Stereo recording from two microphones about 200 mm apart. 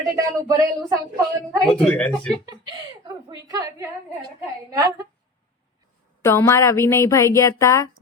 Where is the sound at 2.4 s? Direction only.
20° right (ahead or behind).